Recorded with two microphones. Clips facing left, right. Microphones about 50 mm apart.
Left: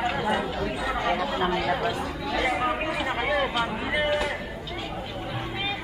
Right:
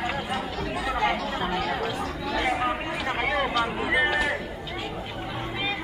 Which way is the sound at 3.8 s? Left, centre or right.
Centre.